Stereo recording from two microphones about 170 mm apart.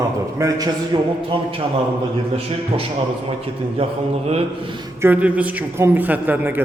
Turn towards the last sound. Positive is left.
turn(degrees=-10)  # may be behind; listen again after turning